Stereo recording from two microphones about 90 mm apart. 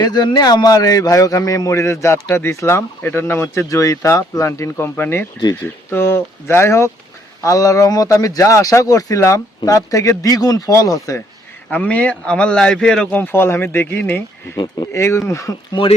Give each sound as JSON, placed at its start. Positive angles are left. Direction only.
{"t": 0.0, "sound": "a man's voice", "side_deg": 50}
{"t": 4.9, "sound": "speech", "side_deg": 20}
{"t": 11.7, "sound": "a man's voice", "side_deg": 15}
{"t": 13.1, "sound": "speech", "side_deg": 25}